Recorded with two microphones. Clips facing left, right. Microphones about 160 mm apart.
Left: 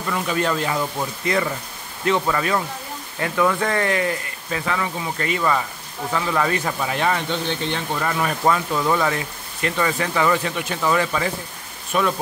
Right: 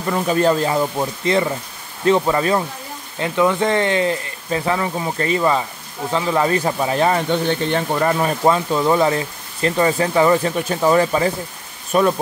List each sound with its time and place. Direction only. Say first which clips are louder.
0.1 s speech: right 6 dB; 35° right (ahead or behind)
7.2 s speech: right 6 dB; 50° right (ahead or behind)